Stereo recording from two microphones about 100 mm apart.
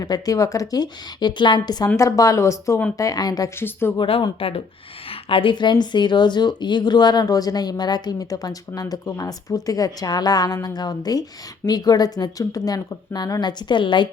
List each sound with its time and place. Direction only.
0.0 s speech: 35° left (ahead or behind)
3.6 s speech: 25° left (ahead or behind)
4.4 s speech: 70° left (ahead or behind); by 14.1 s 50° left (ahead or behind)